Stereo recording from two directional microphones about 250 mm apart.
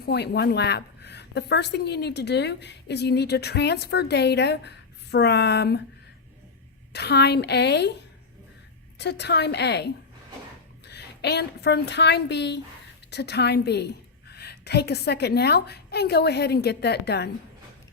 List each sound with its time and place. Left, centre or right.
0.0 s a woman's voice: left
6.9 s a woman's voice: left
9.0 s a woman's voice: left